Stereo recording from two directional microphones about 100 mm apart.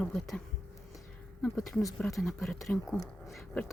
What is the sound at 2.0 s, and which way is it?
Speech, 5° left (ahead or behind).